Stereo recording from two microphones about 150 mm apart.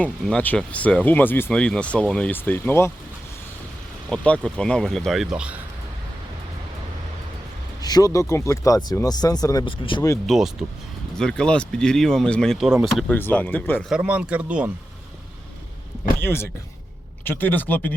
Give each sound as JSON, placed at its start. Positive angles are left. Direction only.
{"t": 0.0, "sound": "speech", "side_deg": 10}
{"t": 4.1, "sound": "speech", "side_deg": 5}
{"t": 7.8, "sound": "speech", "side_deg": 25}
{"t": 10.2, "sound": "speech", "side_deg": -5}
{"t": 13.1, "sound": "speech", "side_deg": 10}
{"t": 13.8, "sound": "speech", "side_deg": -5}
{"t": 16.2, "sound": "speech", "side_deg": 15}